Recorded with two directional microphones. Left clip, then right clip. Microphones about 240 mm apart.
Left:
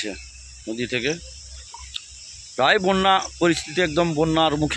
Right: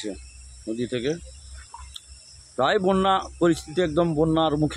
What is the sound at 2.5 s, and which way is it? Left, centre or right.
Speech, centre.